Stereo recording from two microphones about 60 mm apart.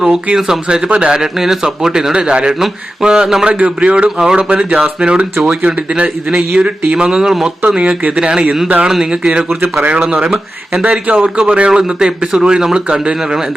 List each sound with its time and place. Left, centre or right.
0.0 s speech: centre
11.1 s speech: centre